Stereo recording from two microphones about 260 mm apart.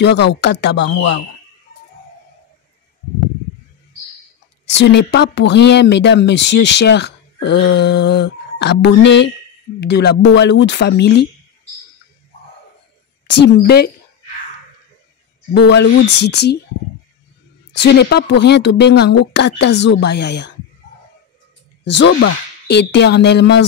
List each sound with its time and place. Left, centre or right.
0.0 s speech: left
4.6 s speech: left
13.3 s speech: left
15.5 s speech: left
17.8 s speech: left
21.8 s speech: left